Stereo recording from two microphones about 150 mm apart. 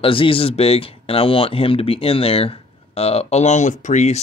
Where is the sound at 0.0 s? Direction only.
35° left (ahead or behind).